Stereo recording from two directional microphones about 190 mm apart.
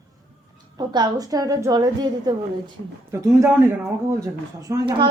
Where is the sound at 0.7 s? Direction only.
20° right (ahead or behind).